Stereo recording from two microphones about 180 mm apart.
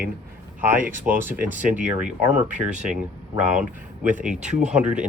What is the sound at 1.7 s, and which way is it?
Speech, 45° right (ahead or behind).